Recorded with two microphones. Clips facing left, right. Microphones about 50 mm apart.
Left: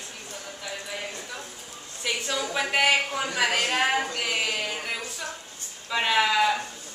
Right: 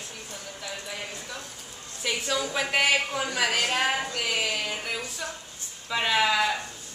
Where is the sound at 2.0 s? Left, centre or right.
Centre.